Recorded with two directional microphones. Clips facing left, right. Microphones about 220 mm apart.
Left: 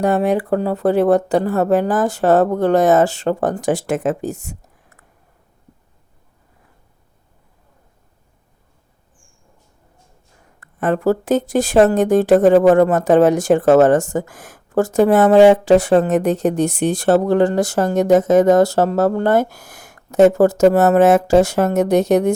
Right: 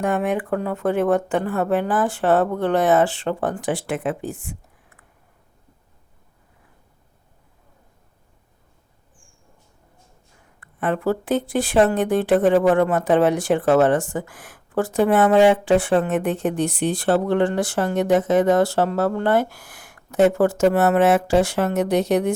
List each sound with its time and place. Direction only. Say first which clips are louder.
0.0 s speech: left 5 dB; 35° left (ahead or behind)
10.6 s speech: left 5 dB; 45° left (ahead or behind)